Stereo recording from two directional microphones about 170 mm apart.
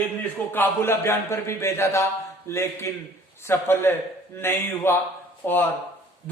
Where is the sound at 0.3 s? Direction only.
10° left (ahead or behind).